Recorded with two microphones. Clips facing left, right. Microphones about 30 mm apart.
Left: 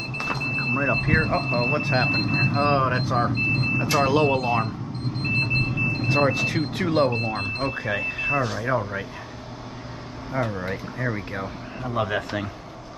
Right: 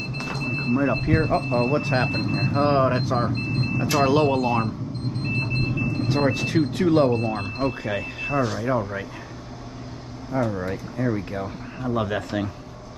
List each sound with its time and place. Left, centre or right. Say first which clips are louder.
0.2 s a sound: left 3 dB; centre
0.9 s speech: even; centre
2.0 s speech: left 3 dB; left
2.7 s speech: right 1 dB; centre
5.2 s a sound: left 4 dB; left
6.0 s speech: left 2 dB; centre
10.3 s speech: right 2 dB; left